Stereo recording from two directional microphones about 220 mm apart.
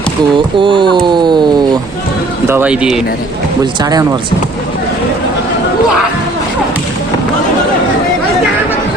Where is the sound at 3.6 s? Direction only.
15° right (ahead or behind).